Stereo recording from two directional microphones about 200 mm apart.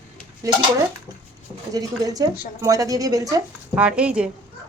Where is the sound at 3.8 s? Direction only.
5° right (ahead or behind).